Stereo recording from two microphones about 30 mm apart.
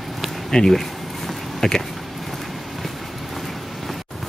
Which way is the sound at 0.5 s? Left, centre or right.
Centre.